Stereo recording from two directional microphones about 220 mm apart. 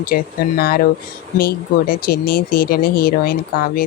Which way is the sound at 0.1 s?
40° left (ahead or behind).